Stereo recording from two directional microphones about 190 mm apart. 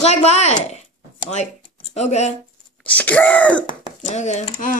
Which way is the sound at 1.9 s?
35° left (ahead or behind).